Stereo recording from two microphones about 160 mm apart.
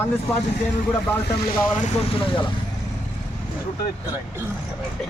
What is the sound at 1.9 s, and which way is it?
Speech, 35° left (ahead or behind).